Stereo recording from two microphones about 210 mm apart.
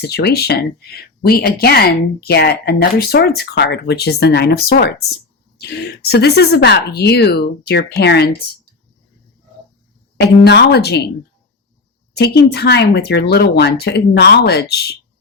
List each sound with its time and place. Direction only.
0.0 s speech: 50° left (ahead or behind)
10.2 s speech: 55° left (ahead or behind)
12.1 s speech: 50° left (ahead or behind)